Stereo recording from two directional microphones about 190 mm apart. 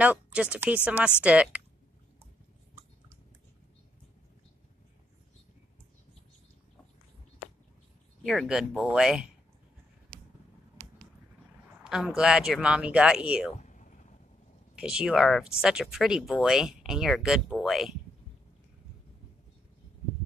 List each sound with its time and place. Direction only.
0.0 s speech: 5° right (ahead or behind)
8.2 s speech: centre (ahead or behind)
11.8 s speech: 5° right (ahead or behind)
13.6 s a sound: 40° left (ahead or behind)
14.8 s speech: 5° right (ahead or behind)